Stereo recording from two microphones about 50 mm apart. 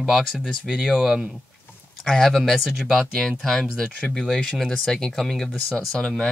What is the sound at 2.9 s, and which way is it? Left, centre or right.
Speech, centre.